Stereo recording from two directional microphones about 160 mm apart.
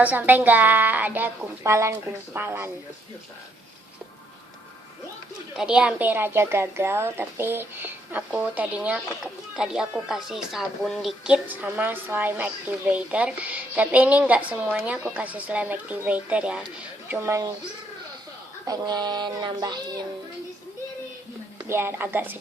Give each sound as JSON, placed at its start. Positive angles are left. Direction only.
{"t": 0.0, "sound": "speech", "side_deg": -10}
{"t": 5.5, "sound": "speech", "side_deg": -5}
{"t": 18.6, "sound": "speech", "side_deg": -25}
{"t": 21.7, "sound": "speech", "side_deg": -15}